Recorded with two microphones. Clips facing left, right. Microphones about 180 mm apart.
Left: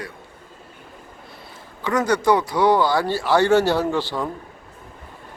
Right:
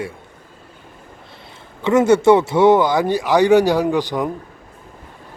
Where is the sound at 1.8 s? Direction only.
25° right (ahead or behind).